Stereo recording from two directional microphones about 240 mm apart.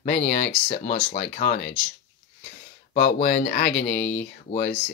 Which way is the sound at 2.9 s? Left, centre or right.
Left.